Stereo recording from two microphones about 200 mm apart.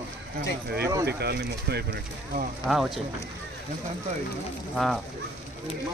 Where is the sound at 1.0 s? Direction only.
55° right (ahead or behind).